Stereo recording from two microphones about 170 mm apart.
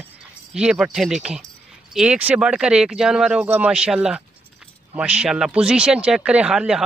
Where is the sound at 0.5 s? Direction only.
5° right (ahead or behind).